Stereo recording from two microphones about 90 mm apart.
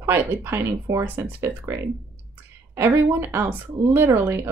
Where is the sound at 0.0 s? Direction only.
25° right (ahead or behind).